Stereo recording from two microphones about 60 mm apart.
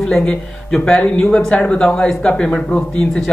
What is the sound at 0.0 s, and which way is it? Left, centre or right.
Speech, centre.